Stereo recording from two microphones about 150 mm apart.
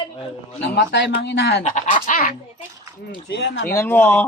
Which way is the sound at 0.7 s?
90° left.